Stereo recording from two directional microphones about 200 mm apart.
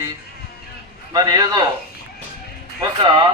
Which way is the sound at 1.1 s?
20° right (ahead or behind).